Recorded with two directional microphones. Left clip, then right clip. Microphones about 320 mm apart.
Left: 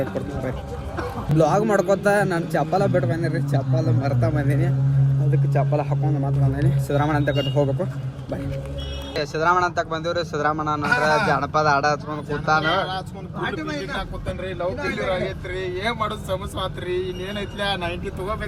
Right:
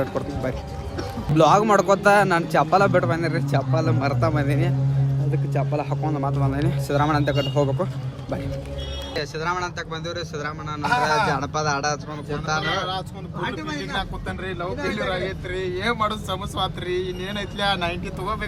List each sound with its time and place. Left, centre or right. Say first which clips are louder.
1.4 s speech: right 3 dB; centre
9.1 s speech: left 7 dB; centre
14.3 s speech: left 2 dB; centre